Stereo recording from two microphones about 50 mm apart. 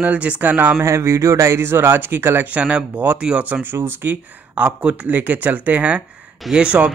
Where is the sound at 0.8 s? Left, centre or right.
Right.